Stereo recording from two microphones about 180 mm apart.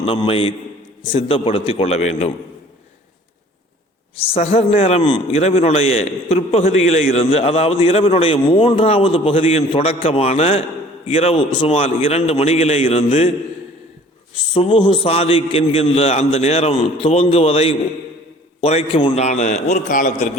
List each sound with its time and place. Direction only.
0.0 s a man's voice: 30° left (ahead or behind)
4.1 s a man's voice: 35° left (ahead or behind)
14.5 s a man's voice: 30° left (ahead or behind)